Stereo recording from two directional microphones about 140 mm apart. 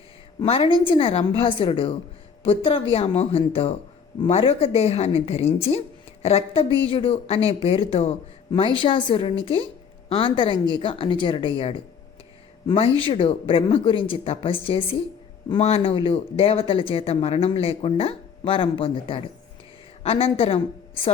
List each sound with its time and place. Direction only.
0.3 s a woman's voice: 45° left (ahead or behind)